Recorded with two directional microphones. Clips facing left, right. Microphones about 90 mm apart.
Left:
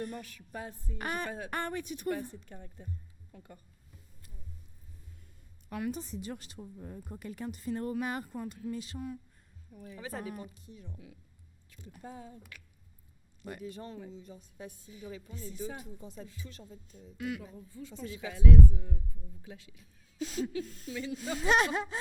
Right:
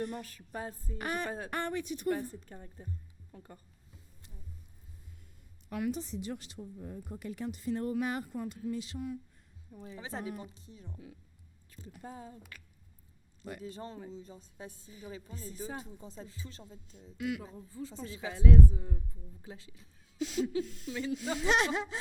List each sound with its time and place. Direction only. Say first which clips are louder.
0.1 s a woman's voice: right 1 dB; 35° right (ahead or behind)
0.9 s speech: even; 45° left (ahead or behind)
2.0 s a woman's voice: right 2 dB; 40° right (ahead or behind)
5.7 s speech: right 1 dB; 45° left (ahead or behind)
9.7 s a woman's voice: even; 25° right (ahead or behind)
13.7 s a woman's voice: even; 30° right (ahead or behind)
16.9 s speech: right 2 dB; 40° left (ahead or behind)
17.4 s a woman's voice: right 2 dB; 35° right (ahead or behind)
20.1 s speech: right 2 dB; 40° left (ahead or behind)
20.9 s a woman's voice: right 2 dB; 35° right (ahead or behind)
21.3 s speech: left 2 dB; 45° left (ahead or behind)